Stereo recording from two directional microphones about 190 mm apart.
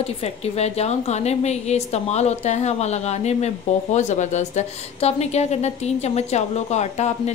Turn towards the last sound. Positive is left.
turn(degrees=35)  # may be behind; listen again after turning